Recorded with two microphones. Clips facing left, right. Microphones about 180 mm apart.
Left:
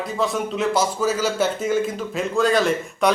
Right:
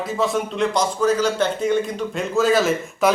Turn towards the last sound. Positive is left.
turn(degrees=-5)  # may be behind; listen again after turning